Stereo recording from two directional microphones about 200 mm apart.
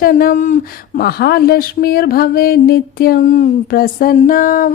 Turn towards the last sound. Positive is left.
turn(degrees=45)  # may be behind; listen again after turning